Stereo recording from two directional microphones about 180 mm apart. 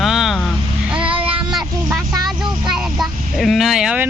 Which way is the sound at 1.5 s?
5° right (ahead or behind).